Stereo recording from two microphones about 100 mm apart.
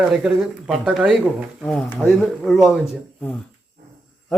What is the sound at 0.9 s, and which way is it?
Speech, 10° right (ahead or behind).